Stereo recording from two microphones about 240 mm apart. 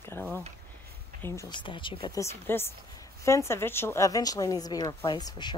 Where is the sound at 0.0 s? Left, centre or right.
Centre.